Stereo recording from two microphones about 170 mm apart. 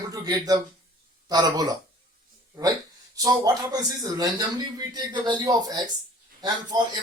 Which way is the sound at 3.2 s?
20° right (ahead or behind).